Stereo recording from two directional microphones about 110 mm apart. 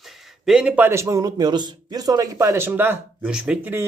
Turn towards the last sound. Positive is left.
turn(degrees=-10)  # may be behind; listen again after turning